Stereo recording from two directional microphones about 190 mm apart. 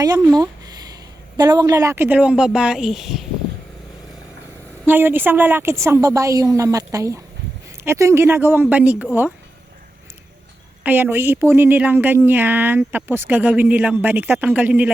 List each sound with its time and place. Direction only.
0.0 s speech: 20° right (ahead or behind); by 3.2 s centre (ahead or behind)
4.9 s a woman's voice: 10° right (ahead or behind)
10.8 s a woman's voice: 10° right (ahead or behind)